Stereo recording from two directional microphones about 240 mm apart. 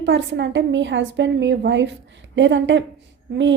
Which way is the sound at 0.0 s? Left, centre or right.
Right.